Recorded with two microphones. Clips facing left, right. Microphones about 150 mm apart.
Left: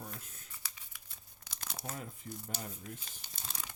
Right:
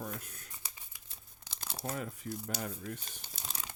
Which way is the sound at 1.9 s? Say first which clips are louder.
Right 7 dB; 75° right (ahead or behind).